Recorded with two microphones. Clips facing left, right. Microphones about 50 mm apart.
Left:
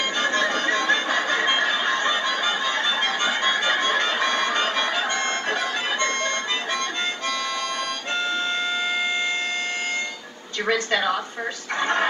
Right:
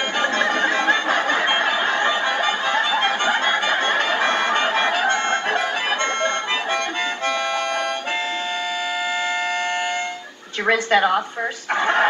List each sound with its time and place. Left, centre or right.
0.2 s music: right
10.7 s speech: right